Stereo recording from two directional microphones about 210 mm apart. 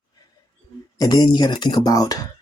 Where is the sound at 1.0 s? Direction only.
20° left (ahead or behind).